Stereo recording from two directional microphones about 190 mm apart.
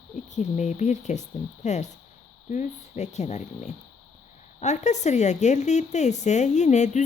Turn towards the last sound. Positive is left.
turn(degrees=40)  # may be behind; listen again after turning